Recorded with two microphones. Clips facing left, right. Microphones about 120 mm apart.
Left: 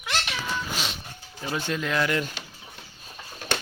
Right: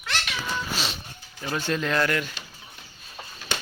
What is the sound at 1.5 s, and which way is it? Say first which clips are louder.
Speech: right 2 dB; 10° left (ahead or behind).